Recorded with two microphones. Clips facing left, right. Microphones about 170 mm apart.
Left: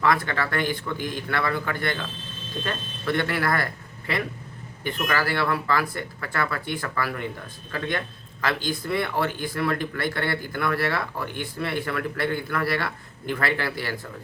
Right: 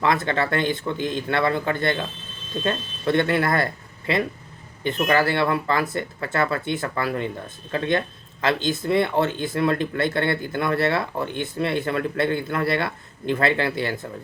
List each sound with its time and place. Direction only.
0.0 s speech: 20° right (ahead or behind)